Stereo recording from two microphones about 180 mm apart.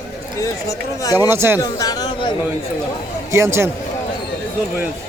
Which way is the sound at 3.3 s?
15° right (ahead or behind).